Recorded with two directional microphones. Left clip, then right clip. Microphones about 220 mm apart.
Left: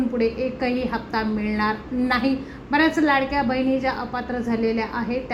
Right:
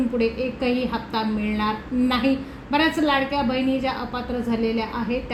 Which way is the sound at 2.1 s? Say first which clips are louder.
Even; centre (ahead or behind).